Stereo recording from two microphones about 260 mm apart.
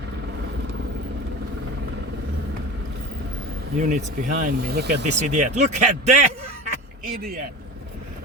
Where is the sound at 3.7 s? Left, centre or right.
Right.